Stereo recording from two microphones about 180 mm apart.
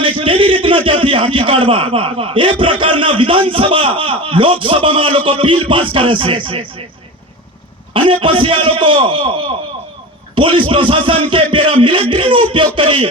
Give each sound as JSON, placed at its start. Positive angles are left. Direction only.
{"t": 0.3, "sound": "a man's voice", "side_deg": -30}
{"t": 7.9, "sound": "a man's voice", "side_deg": -30}